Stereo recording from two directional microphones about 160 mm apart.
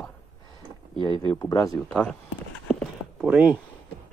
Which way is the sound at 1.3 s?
20° left (ahead or behind).